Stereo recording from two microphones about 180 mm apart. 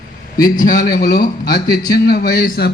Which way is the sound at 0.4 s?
45° left (ahead or behind).